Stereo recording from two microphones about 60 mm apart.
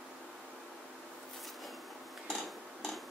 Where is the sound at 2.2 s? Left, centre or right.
Centre.